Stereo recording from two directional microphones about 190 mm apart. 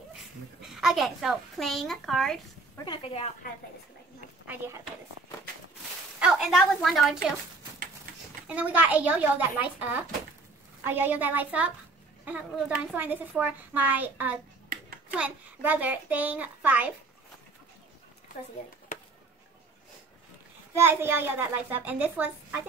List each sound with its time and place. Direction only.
0.1 s a woman's voice: centre (ahead or behind)
2.8 s speech: 30° left (ahead or behind)
4.5 s a woman's voice: 15° right (ahead or behind)
6.1 s a sound: 5° right (ahead or behind)
6.6 s a woman's voice: centre (ahead or behind)
8.5 s a woman's voice: 5° right (ahead or behind)
20.7 s a woman's voice: 10° right (ahead or behind)